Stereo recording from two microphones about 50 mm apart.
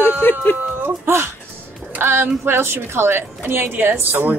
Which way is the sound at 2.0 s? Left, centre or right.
Right.